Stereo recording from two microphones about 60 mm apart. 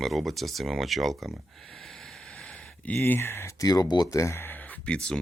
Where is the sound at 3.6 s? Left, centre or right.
Left.